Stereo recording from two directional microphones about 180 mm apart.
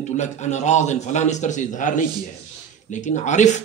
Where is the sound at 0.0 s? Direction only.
40° left (ahead or behind).